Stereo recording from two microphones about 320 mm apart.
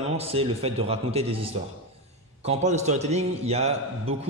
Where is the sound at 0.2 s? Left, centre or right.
Centre.